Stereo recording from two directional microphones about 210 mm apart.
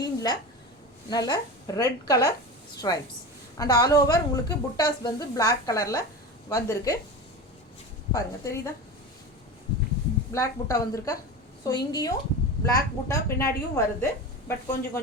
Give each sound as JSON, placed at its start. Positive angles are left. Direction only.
{"t": 0.0, "sound": "a sound", "side_deg": 20}
{"t": 1.1, "sound": "a woman's voice", "side_deg": 20}
{"t": 8.1, "sound": "a woman's voice", "side_deg": 15}
{"t": 10.3, "sound": "a woman's voice", "side_deg": 15}